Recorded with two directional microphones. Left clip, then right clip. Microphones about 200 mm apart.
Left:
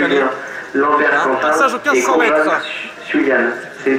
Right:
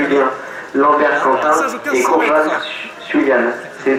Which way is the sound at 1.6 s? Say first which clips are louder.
Left 3 dB; 40° left (ahead or behind).